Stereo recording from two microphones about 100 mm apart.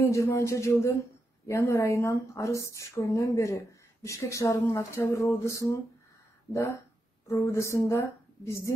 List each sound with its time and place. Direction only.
0.0 s speech: 30° left (ahead or behind)